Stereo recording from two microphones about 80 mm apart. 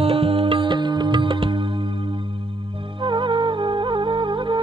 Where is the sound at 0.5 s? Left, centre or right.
Right.